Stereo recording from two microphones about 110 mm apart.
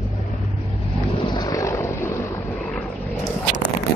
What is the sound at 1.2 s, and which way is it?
Vehicle, 40° left (ahead or behind).